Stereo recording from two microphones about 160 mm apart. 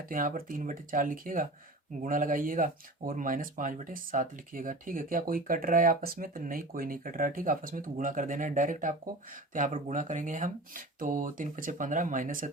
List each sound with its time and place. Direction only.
0.1 s speech: 60° right (ahead or behind)